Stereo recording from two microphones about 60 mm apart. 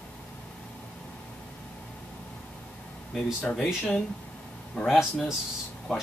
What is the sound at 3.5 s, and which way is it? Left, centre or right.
Speech, centre.